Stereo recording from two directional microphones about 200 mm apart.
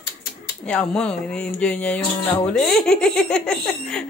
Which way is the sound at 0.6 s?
5° left (ahead or behind).